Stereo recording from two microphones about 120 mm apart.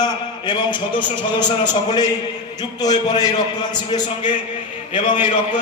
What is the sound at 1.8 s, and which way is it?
A man's voice, 35° left (ahead or behind).